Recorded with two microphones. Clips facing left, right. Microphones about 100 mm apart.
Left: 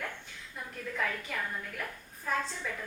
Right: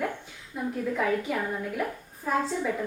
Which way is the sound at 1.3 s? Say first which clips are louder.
Right 8 dB; 25° right (ahead or behind).